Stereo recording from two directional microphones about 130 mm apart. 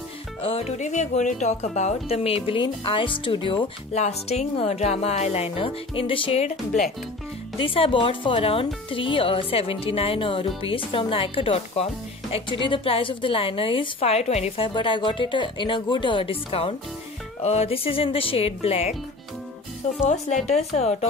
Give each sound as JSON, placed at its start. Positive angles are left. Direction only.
{"t": 0.4, "sound": "speech", "side_deg": 50}
{"t": 3.9, "sound": "speech", "side_deg": 55}
{"t": 7.5, "sound": "speech", "side_deg": 45}
{"t": 14.7, "sound": "speech", "side_deg": 40}
{"t": 20.1, "sound": "speech", "side_deg": 65}